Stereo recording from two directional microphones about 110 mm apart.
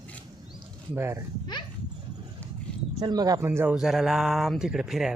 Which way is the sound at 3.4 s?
20° right (ahead or behind).